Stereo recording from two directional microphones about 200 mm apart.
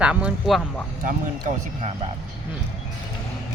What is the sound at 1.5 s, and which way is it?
Speech, 40° right (ahead or behind).